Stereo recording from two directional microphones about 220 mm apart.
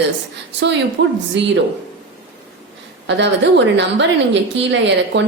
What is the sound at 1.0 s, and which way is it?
Speech, 55° right (ahead or behind).